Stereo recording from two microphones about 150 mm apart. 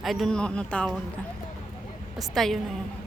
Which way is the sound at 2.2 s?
Centre (ahead or behind).